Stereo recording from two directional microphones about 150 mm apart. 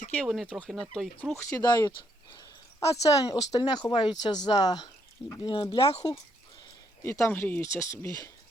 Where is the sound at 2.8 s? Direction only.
45° left (ahead or behind).